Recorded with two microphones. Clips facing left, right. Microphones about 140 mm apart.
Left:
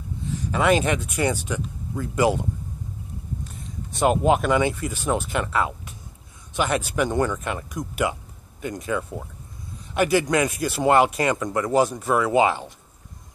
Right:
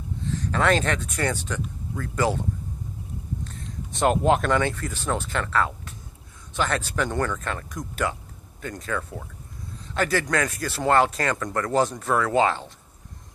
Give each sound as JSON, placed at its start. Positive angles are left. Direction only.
{"t": 0.2, "sound": "speech", "side_deg": 10}
{"t": 3.4, "sound": "speech", "side_deg": 10}